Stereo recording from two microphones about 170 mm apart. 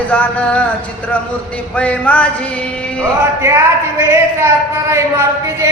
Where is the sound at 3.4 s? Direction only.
15° right (ahead or behind).